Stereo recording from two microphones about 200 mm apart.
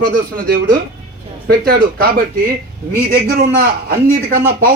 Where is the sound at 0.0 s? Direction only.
45° right (ahead or behind).